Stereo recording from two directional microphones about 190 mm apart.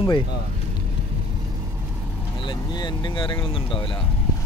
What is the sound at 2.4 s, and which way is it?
Vehicle, 25° left (ahead or behind).